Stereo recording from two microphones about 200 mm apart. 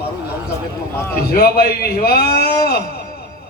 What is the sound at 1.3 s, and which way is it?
A man's voice, 50° left (ahead or behind).